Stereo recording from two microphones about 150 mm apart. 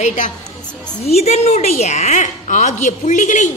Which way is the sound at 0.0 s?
55° left (ahead or behind).